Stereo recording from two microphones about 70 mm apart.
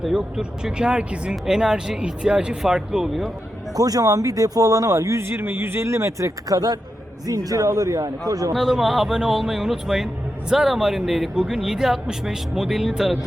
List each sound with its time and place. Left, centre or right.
0.0 s speech: centre
3.8 s speech: right
5.2 s a man's voice: right
8.5 s speech: centre